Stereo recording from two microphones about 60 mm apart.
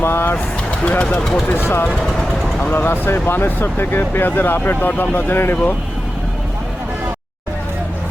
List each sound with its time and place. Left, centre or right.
0.0 s speech: left
0.7 s speech: centre
1.2 s speech: centre
1.5 s speech: left